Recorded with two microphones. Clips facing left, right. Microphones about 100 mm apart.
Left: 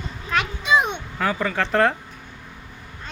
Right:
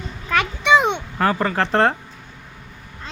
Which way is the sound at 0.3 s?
70° right (ahead or behind).